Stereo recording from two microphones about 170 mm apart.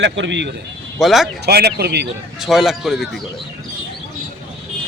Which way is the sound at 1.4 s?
70° right (ahead or behind).